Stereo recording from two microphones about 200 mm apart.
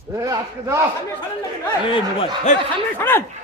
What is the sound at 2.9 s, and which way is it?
Speech, 10° left (ahead or behind).